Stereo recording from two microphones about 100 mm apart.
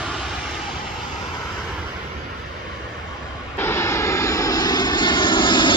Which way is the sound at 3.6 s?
25° left (ahead or behind).